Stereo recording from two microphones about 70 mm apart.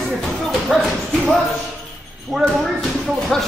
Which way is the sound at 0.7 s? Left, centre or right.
Centre.